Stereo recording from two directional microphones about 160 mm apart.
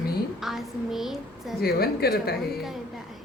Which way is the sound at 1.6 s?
75° left (ahead or behind).